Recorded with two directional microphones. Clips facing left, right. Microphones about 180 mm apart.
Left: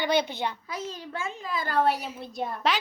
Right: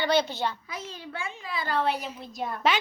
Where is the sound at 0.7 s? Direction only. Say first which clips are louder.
Left 3 dB; 40° left (ahead or behind).